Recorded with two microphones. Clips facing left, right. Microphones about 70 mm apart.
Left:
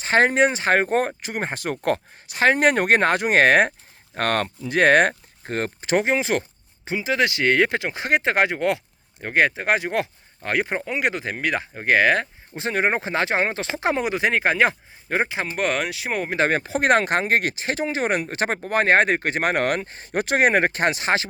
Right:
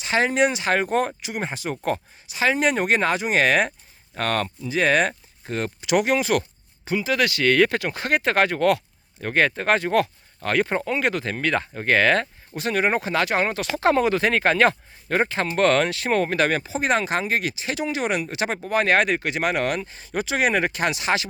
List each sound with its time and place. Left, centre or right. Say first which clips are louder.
0.0 s speech: left 3 dB; left; by 12.3 s centre
12.5 s speech: even; left
16.4 s speech: left 1 dB; left
16.7 s speech: left 3 dB; left